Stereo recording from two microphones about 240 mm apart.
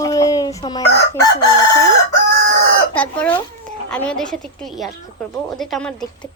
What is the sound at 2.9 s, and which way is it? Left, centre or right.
Speech, centre.